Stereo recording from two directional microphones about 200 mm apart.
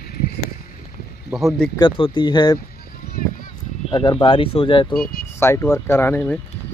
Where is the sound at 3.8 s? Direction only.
25° left (ahead or behind).